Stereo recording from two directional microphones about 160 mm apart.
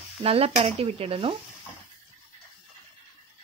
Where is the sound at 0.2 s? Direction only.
40° right (ahead or behind).